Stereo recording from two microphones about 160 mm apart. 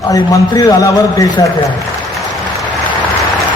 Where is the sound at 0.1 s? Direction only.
20° left (ahead or behind).